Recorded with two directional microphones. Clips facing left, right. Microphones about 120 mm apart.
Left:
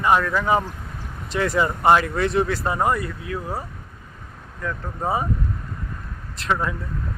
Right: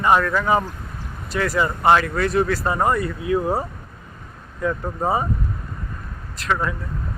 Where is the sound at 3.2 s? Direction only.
25° right (ahead or behind).